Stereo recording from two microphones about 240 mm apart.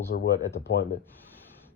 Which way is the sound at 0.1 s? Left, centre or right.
Left.